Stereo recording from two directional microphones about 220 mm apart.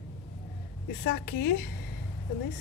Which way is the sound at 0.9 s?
45° left (ahead or behind).